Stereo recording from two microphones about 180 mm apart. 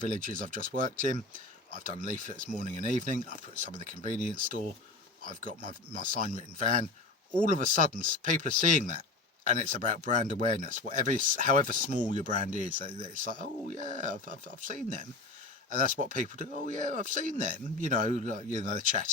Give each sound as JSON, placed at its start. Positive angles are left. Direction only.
{"t": 0.0, "sound": "speech", "side_deg": -45}